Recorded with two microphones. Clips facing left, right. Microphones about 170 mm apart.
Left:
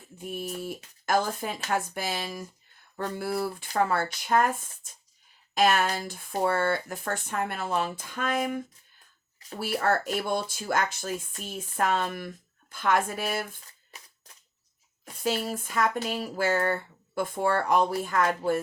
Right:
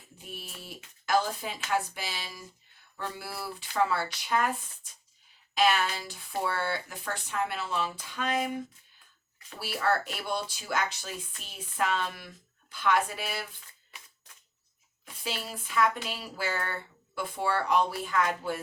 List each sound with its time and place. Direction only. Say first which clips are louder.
0.2 s speech: left 11 dB; 50° left (ahead or behind)
15.0 s speech: left 8 dB; 45° left (ahead or behind)